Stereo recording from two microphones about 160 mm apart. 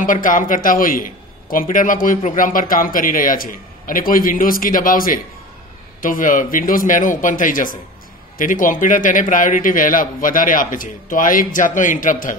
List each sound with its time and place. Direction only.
0.0 s a man's voice: 55° left (ahead or behind)